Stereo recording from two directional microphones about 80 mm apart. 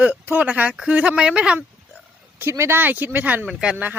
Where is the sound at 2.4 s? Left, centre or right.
Right.